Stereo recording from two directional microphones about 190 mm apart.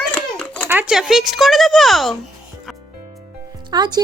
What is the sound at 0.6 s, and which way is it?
Speech, 5° right (ahead or behind).